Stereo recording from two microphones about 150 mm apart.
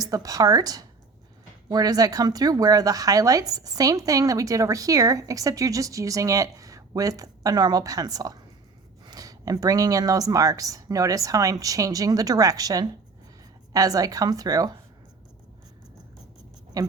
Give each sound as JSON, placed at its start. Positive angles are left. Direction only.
{"t": 0.0, "sound": "speech", "side_deg": -25}
{"t": 16.7, "sound": "speech", "side_deg": -25}